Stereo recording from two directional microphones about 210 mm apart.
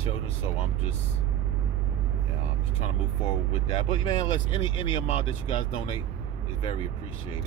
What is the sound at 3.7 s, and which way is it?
Speech, 20° left (ahead or behind).